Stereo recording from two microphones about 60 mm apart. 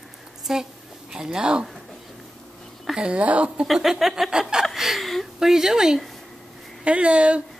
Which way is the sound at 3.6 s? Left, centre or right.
Centre.